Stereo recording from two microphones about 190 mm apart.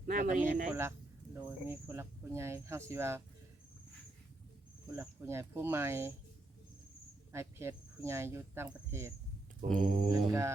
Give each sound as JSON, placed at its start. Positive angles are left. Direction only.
{"t": 0.0, "sound": "speech", "side_deg": -45}
{"t": 0.7, "sound": "speech", "side_deg": -15}
{"t": 4.9, "sound": "speech", "side_deg": -10}
{"t": 7.3, "sound": "speech", "side_deg": -15}
{"t": 9.6, "sound": "speech", "side_deg": 0}
{"t": 10.1, "sound": "speech", "side_deg": -15}